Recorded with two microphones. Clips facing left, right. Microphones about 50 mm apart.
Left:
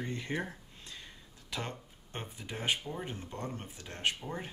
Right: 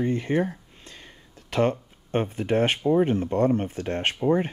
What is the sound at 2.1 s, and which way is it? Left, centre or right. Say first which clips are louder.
Speech: right 19 dB; right.